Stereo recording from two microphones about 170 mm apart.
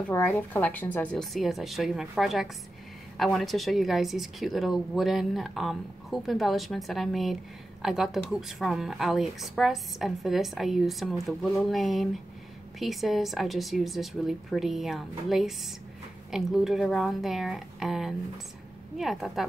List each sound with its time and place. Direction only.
0.1 s speech: 10° left (ahead or behind)